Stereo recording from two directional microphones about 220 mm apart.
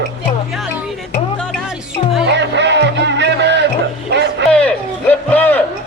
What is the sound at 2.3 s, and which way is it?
Music, 50° right (ahead or behind).